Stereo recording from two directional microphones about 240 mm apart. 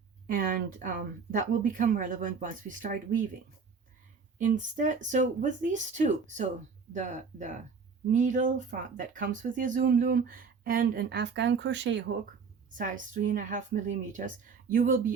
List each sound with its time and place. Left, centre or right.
0.3 s speech: right
4.4 s speech: right
12.7 s speech: right